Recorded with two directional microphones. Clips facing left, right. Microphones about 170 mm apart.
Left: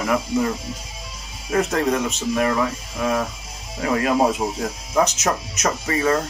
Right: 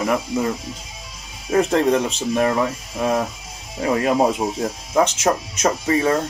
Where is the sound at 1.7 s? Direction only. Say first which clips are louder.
Right 3 dB; 30° right (ahead or behind).